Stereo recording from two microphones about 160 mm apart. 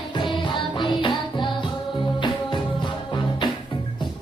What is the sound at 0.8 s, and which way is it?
Music, 30° left (ahead or behind).